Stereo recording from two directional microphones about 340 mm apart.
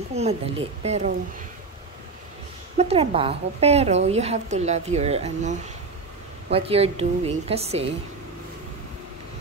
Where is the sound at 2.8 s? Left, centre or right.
Centre.